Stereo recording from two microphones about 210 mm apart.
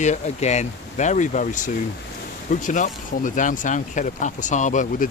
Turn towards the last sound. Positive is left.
turn(degrees=35)  # may be behind; listen again after turning